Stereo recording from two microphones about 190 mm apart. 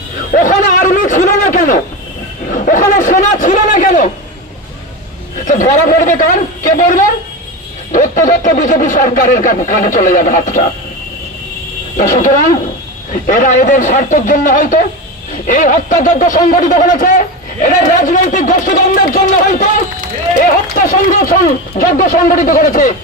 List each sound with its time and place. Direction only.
0.3 s a sound: 45° left (ahead or behind)
5.5 s speech: 45° left (ahead or behind)
12.0 s speech: 45° left (ahead or behind)
20.7 s speech: 45° left (ahead or behind)